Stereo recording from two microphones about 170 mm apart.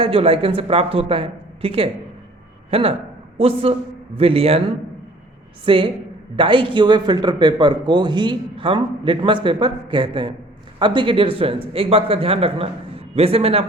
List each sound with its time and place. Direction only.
0.0 s a man's voice: 35° right (ahead or behind)
5.6 s a man's voice: 30° right (ahead or behind)